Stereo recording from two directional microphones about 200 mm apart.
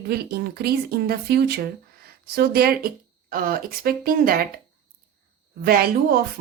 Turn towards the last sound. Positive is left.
turn(degrees=-50)  # may be behind; listen again after turning